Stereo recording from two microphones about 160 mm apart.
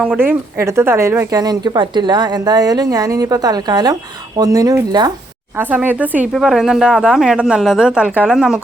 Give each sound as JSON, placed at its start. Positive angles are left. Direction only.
{"t": 0.0, "sound": "speech", "side_deg": -10}
{"t": 5.5, "sound": "speech", "side_deg": -10}